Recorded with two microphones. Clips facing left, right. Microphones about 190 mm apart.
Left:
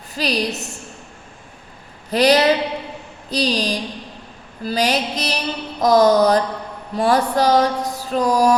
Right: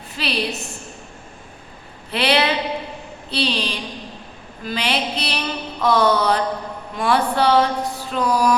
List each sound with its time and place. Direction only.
0.2 s a woman's voice: 40° left (ahead or behind)
2.0 s a woman's voice: 40° left (ahead or behind)